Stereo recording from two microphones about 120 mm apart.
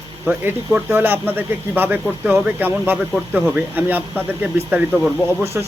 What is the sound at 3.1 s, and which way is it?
Speech, 5° right (ahead or behind).